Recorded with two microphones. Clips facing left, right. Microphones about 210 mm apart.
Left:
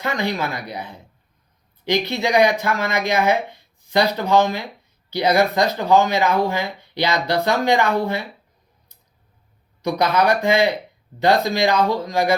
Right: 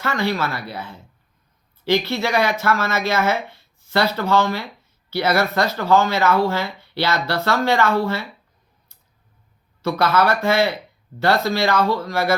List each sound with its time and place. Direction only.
0.0 s speech: 15° left (ahead or behind)
9.8 s speech: 15° left (ahead or behind)